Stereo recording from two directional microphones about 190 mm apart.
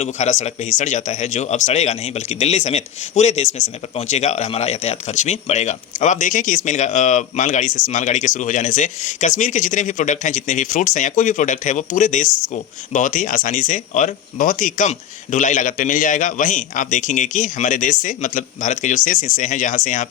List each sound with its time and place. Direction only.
0.0 s speech: 40° left (ahead or behind)